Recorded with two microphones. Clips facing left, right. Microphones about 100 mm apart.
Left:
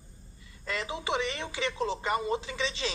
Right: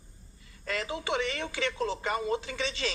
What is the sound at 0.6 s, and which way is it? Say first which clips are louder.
A woman's voice: even; 25° left (ahead or behind).